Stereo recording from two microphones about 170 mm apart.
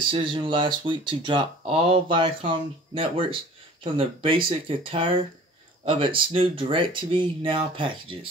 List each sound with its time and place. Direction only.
0.1 s speech: 30° right (ahead or behind)